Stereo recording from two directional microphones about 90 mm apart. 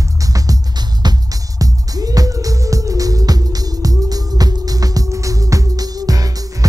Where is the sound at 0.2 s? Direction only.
40° right (ahead or behind).